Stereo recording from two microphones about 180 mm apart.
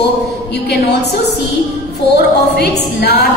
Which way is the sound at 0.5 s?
65° left (ahead or behind).